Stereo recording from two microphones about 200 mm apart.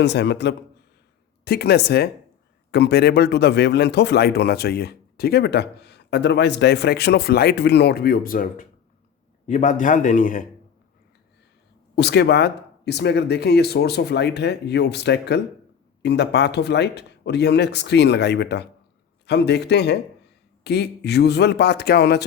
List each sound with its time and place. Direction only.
0.0 s a man's voice: 60° left (ahead or behind); by 10.4 s 40° left (ahead or behind)
11.9 s speech: 55° left (ahead or behind)